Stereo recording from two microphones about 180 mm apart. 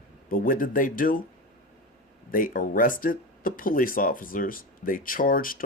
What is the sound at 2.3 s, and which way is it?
Speech, 50° left (ahead or behind).